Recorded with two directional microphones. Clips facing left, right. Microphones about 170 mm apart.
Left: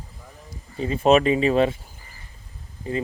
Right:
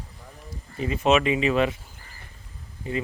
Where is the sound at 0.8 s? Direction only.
30° left (ahead or behind).